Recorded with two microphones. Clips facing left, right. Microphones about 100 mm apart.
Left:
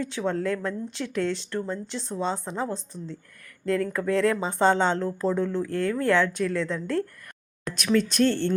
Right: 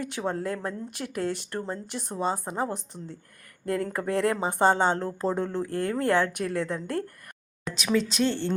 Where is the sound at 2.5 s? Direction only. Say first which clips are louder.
Even; 35° right (ahead or behind).